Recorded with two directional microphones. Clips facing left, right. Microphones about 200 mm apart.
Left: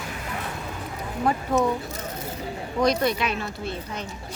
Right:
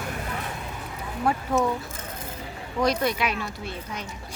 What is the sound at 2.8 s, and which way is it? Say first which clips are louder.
Speech: left 2 dB; 10° right (ahead or behind).